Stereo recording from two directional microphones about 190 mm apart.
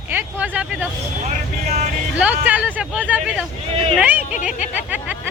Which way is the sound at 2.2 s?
10° right (ahead or behind).